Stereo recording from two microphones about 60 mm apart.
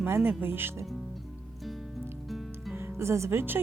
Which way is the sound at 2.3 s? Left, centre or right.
Centre.